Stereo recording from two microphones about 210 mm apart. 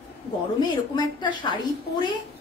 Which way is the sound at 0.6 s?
20° left (ahead or behind).